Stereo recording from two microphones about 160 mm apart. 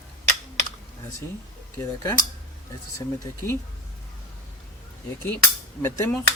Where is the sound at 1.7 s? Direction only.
20° left (ahead or behind).